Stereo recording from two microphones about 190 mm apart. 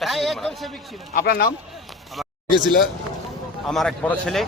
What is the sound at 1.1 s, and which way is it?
Speech, 50° left (ahead or behind).